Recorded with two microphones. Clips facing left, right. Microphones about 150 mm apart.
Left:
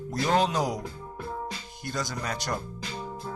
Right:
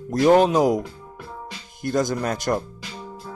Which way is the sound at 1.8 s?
50° right (ahead or behind).